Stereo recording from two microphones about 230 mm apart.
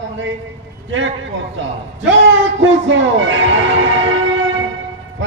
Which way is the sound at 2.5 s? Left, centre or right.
Right.